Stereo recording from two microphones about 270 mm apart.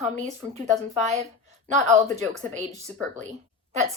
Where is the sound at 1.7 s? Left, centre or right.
Right.